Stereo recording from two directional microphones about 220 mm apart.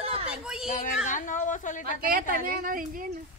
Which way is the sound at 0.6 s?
35° left (ahead or behind).